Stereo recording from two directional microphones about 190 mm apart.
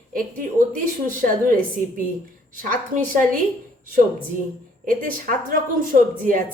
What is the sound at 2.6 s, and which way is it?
Speech, 45° right (ahead or behind).